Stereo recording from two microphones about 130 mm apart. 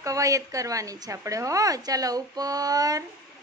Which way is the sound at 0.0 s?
25° right (ahead or behind).